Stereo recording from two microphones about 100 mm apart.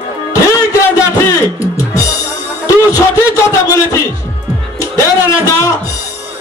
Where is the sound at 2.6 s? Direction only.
30° left (ahead or behind).